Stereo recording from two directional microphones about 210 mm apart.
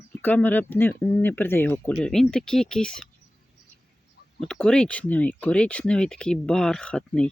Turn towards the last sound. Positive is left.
turn(degrees=5)  # may be behind; listen again after turning